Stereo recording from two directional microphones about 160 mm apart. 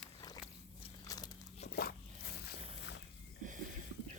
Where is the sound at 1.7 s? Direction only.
75° left (ahead or behind).